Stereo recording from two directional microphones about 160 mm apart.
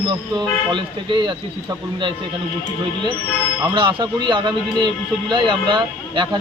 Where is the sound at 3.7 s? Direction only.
30° right (ahead or behind).